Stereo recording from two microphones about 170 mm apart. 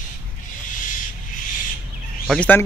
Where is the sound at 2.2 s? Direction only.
10° left (ahead or behind).